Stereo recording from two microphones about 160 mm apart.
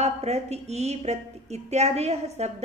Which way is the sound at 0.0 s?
40° right (ahead or behind).